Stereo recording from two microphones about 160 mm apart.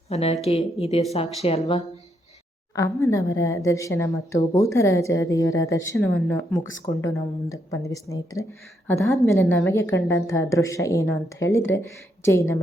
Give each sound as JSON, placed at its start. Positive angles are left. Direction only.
{"t": 0.1, "sound": "a woman's voice", "side_deg": 40}
{"t": 2.7, "sound": "a woman's voice", "side_deg": 20}